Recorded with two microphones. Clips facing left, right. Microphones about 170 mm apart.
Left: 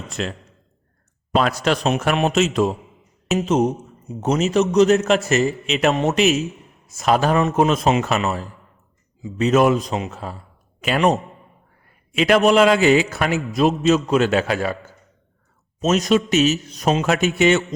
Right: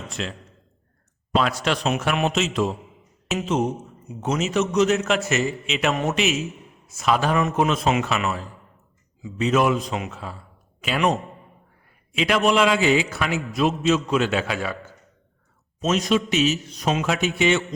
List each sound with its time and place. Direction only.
0.1 s a man's voice: 45° left (ahead or behind)
1.4 s a man's voice: 45° left (ahead or behind)
5.9 s a man's voice: 25° left (ahead or behind)
6.1 s a man's voice: 40° left (ahead or behind)
15.9 s a man's voice: 45° left (ahead or behind)